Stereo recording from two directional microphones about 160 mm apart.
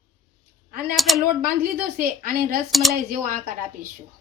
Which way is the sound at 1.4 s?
65° right (ahead or behind).